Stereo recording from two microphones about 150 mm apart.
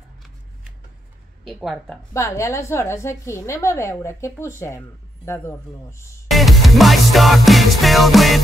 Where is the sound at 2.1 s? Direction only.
20° left (ahead or behind).